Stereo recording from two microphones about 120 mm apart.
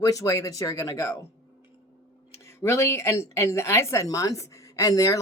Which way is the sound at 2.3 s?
20° left (ahead or behind).